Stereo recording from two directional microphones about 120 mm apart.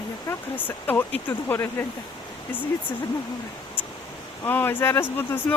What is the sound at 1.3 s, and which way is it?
Speech, 20° left (ahead or behind).